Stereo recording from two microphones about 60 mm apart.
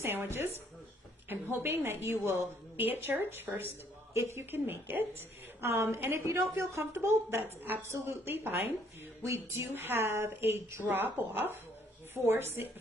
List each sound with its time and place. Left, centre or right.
0.0 s a woman's voice: right
5.6 s a woman's voice: right
7.9 s a woman's voice: right
8.3 s a woman's voice: right
9.2 s a woman's voice: right
12.2 s a woman's voice: right